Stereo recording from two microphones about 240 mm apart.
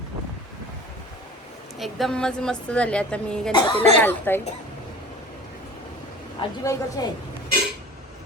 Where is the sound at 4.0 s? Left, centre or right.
Centre.